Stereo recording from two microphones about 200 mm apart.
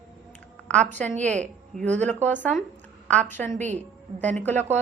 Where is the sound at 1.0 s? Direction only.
5° left (ahead or behind).